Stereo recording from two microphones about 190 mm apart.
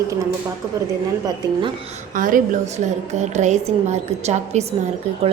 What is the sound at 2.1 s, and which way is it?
A woman's voice, 45° right (ahead or behind).